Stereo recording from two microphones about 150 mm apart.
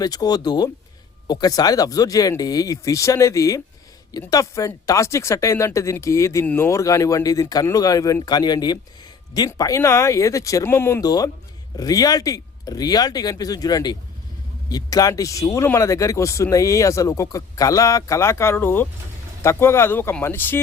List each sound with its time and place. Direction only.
0.0 s speech: 25° left (ahead or behind)